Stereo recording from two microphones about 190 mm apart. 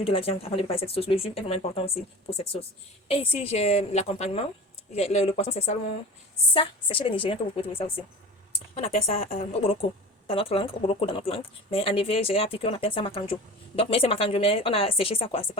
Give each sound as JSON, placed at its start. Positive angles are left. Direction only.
{"t": 0.0, "sound": "speech", "side_deg": 30}